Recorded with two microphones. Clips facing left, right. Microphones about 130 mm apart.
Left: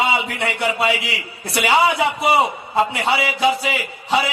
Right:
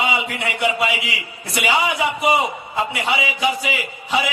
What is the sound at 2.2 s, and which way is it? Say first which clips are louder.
A man's voice: left 2 dB; 35° left (ahead or behind).